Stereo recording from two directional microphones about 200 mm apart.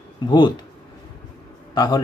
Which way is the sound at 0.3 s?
25° left (ahead or behind).